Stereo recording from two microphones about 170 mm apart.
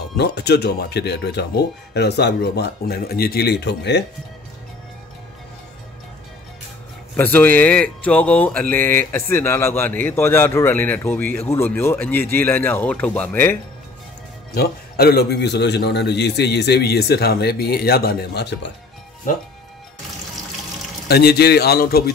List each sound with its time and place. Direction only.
0.2 s a man's voice: 75° left (ahead or behind); by 4.0 s 90° left
7.2 s speech: 10° left (ahead or behind)
14.5 s a man's voice: 65° left (ahead or behind); by 18.7 s 85° left
21.1 s a man's voice: 70° left (ahead or behind)